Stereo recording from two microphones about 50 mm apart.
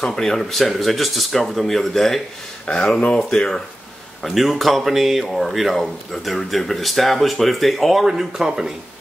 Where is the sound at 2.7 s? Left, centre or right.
Left.